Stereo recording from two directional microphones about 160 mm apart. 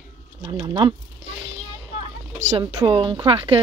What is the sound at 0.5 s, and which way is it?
Speech, 25° right (ahead or behind).